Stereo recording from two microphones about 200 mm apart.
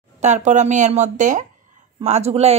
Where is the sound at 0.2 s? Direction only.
35° right (ahead or behind).